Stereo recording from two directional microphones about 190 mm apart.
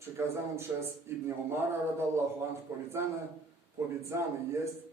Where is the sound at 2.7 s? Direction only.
20° right (ahead or behind).